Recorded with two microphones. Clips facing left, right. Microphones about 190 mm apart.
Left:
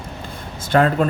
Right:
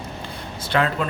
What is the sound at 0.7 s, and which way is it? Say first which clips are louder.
Speech: left 6 dB; 45° left (ahead or behind).